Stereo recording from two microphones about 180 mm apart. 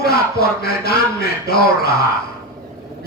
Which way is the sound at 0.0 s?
60° left (ahead or behind).